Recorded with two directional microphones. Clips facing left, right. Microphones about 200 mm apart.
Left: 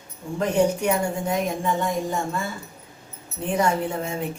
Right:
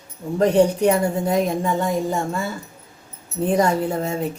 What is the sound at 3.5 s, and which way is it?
Speech, 35° right (ahead or behind).